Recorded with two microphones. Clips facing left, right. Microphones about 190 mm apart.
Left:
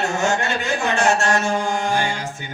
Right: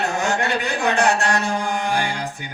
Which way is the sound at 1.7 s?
15° right (ahead or behind).